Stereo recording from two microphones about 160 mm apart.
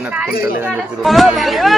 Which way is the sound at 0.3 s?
70° left (ahead or behind).